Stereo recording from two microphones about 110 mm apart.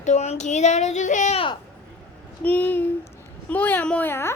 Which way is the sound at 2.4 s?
15° left (ahead or behind).